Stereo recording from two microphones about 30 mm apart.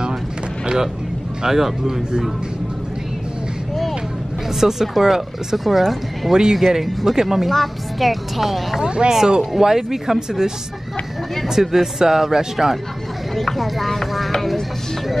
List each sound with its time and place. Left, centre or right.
1.4 s speech: centre
4.6 s speech: centre
6.3 s speech: centre
6.6 s speech: centre
7.4 s speech: centre
8.8 s speech: right
11.6 s speech: centre
13.4 s speech: centre
14.3 s music: centre